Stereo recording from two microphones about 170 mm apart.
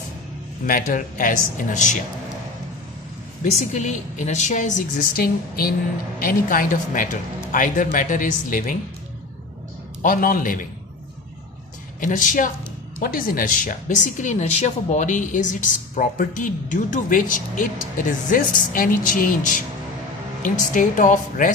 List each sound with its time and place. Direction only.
0.7 s speech: 55° left (ahead or behind)
3.6 s speech: 45° left (ahead or behind)
5.1 s a woman's voice: 60° left (ahead or behind)
10.0 s speech: 55° left (ahead or behind)
11.9 s speech: 50° left (ahead or behind)